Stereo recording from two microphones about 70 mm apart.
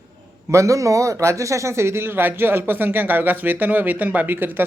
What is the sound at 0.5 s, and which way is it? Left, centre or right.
Speech, right.